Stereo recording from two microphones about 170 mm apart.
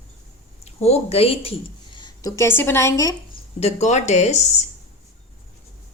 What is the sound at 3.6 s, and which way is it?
A woman's voice, 40° left (ahead or behind).